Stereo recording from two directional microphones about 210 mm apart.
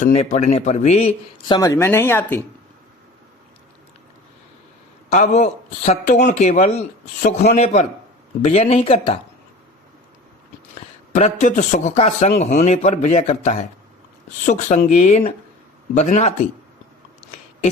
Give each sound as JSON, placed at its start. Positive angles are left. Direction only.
{"t": 0.0, "sound": "speech", "side_deg": 35}
{"t": 1.5, "sound": "speech", "side_deg": 15}
{"t": 5.0, "sound": "speech", "side_deg": 35}
{"t": 10.8, "sound": "speech", "side_deg": 35}